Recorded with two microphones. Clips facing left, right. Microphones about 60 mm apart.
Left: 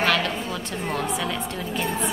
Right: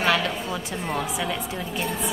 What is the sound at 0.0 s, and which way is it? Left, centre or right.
A woman's voice, centre.